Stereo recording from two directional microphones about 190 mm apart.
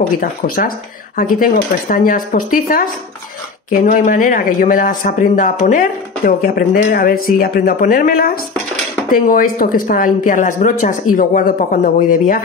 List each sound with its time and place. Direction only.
0.2 s speech: 45° left (ahead or behind)